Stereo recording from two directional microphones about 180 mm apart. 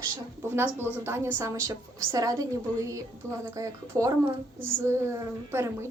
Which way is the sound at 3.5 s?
15° right (ahead or behind).